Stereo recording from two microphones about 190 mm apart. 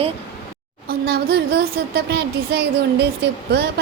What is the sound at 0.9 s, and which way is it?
Speech, 55° right (ahead or behind).